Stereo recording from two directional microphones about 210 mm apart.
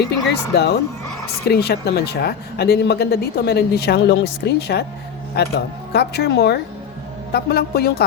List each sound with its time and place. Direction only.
0.5 s speech: 50° left (ahead or behind)